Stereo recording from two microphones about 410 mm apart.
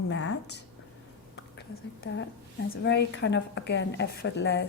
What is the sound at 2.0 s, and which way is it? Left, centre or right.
Speech, left.